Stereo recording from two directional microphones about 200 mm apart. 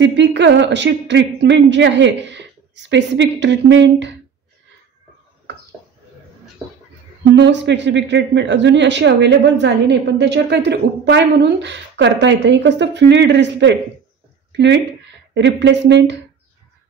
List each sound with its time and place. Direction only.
0.0 s a woman's voice: 60° right (ahead or behind)
7.3 s a woman's voice: 60° right (ahead or behind)